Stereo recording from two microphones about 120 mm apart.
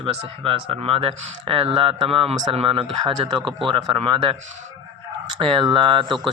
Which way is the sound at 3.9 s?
50° right (ahead or behind).